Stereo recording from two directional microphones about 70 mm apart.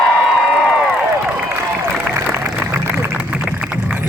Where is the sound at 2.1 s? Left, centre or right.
Right.